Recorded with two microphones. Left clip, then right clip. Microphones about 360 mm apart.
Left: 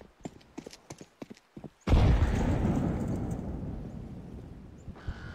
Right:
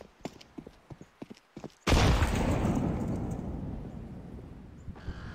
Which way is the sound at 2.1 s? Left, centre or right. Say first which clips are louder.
Right 2 dB; centre.